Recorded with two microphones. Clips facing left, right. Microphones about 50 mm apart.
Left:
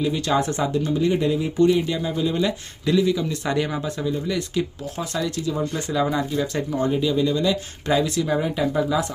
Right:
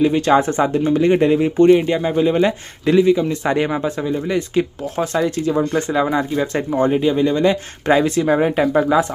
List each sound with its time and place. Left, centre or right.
0.0 s speech: right
0.9 s speech: right